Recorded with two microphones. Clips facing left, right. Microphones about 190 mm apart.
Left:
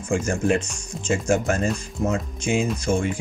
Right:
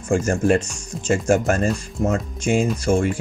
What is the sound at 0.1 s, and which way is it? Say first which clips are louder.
Speech: right 4 dB; 45° right (ahead or behind).